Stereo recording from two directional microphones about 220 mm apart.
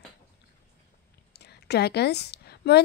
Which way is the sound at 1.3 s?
50° left (ahead or behind).